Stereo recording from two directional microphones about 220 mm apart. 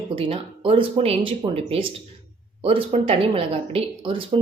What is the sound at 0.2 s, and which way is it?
Speech, 25° right (ahead or behind).